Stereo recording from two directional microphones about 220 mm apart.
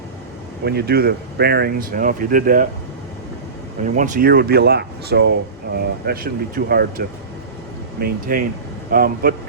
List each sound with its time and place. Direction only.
0.6 s speech: 45° right (ahead or behind)
3.8 s a man's voice: 35° right (ahead or behind)